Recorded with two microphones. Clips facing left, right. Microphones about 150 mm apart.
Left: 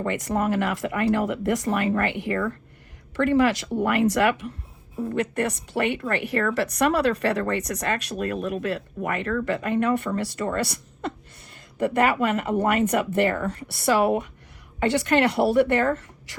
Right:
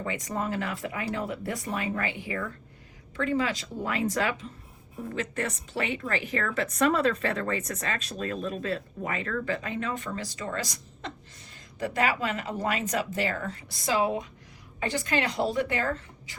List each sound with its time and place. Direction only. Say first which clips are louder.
0.0 s a woman's voice: left 7 dB; 70° left (ahead or behind)